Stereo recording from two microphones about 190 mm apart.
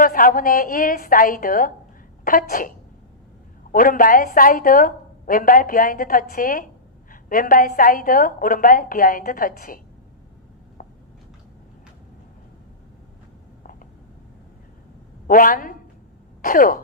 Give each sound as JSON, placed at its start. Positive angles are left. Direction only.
{"t": 0.0, "sound": "a woman's voice", "side_deg": 45}
{"t": 10.8, "sound": "a sound", "side_deg": 45}
{"t": 15.3, "sound": "a woman's voice", "side_deg": 45}